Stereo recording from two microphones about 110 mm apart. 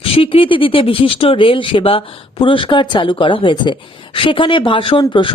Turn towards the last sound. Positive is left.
turn(degrees=50)  # may be behind; listen again after turning